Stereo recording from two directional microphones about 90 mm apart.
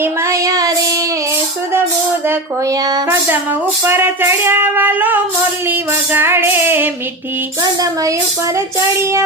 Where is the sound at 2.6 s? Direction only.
40° right (ahead or behind).